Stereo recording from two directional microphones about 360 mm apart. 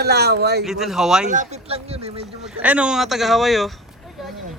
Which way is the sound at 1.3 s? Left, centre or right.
Centre.